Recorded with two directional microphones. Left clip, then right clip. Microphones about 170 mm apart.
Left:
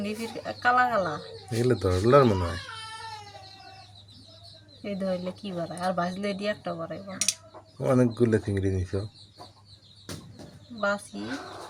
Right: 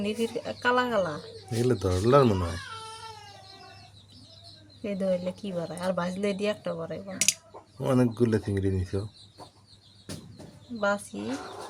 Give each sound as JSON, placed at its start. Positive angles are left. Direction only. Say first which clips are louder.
{"t": 0.0, "sound": "speech", "louder": "right 3 dB", "side_deg": -40}
{"t": 1.5, "sound": "speech", "louder": "left 1 dB", "side_deg": -5}
{"t": 4.8, "sound": "speech", "louder": "right 2 dB", "side_deg": -45}
{"t": 7.8, "sound": "speech", "louder": "left 2 dB", "side_deg": -5}
{"t": 10.8, "sound": "speech", "louder": "even", "side_deg": -40}